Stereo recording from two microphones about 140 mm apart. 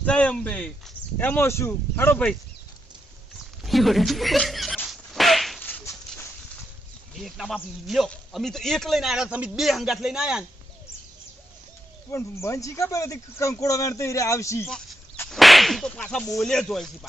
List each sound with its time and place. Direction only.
0.0 s speech: 10° left (ahead or behind)
3.6 s speech: centre (ahead or behind)
4.9 s whip: centre (ahead or behind)
5.5 s dog: 10° left (ahead or behind)
7.3 s speech: centre (ahead or behind)
12.1 s speech: 20° left (ahead or behind)
15.3 s speech: centre (ahead or behind)